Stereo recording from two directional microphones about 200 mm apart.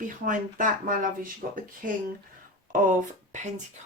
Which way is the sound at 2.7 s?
40° right (ahead or behind).